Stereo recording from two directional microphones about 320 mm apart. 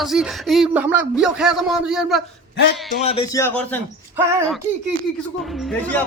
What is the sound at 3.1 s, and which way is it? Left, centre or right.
Speech, centre.